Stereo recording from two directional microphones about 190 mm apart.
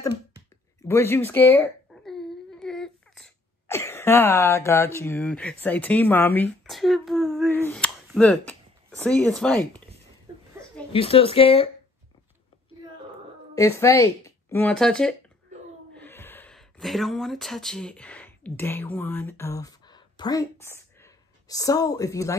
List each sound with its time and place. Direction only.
0.8 s baby cry: 15° left (ahead or behind)
3.6 s speech: 15° left (ahead or behind)
7.5 s a sound: 10° left (ahead or behind)
9.0 s speech: 5° left (ahead or behind)
10.9 s speech: 30° left (ahead or behind)
13.6 s speech: 15° left (ahead or behind)